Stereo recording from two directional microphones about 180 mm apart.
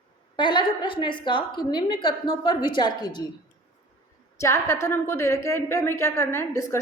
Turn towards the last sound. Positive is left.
turn(degrees=15)  # may be behind; listen again after turning